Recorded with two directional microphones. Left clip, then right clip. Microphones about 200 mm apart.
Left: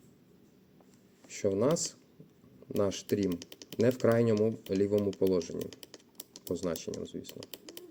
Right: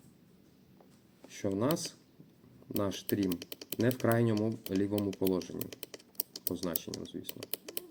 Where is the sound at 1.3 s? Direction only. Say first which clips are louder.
Left 4 dB; 20° left (ahead or behind).